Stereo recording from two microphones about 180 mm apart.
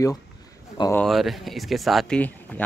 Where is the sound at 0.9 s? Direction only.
Centre (ahead or behind).